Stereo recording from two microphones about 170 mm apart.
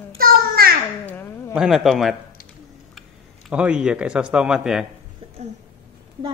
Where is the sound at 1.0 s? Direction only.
10° left (ahead or behind).